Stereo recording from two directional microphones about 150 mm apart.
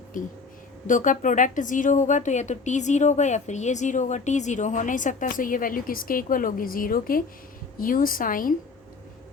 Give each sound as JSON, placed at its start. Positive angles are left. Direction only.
{"t": 0.1, "sound": "a woman's voice", "side_deg": 60}